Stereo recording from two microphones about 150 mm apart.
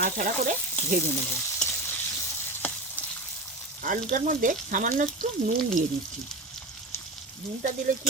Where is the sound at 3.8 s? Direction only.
60° right (ahead or behind).